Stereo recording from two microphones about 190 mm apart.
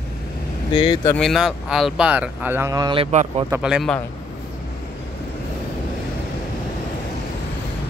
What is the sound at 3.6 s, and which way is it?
Speech, centre (ahead or behind).